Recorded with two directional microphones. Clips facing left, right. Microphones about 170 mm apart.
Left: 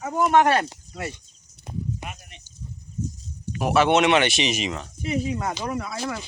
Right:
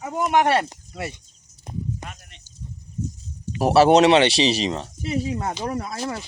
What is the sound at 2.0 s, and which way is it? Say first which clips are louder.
Sheep: left 1 dB; 10° left (ahead or behind).